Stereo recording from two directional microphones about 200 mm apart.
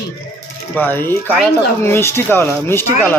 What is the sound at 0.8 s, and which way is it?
Speech, 10° left (ahead or behind).